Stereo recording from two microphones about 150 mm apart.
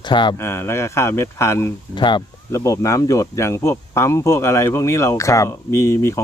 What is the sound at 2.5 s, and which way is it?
Speech, 20° left (ahead or behind).